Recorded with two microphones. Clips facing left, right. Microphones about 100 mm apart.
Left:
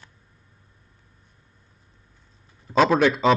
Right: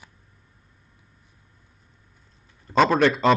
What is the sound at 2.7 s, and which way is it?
Speech, centre (ahead or behind).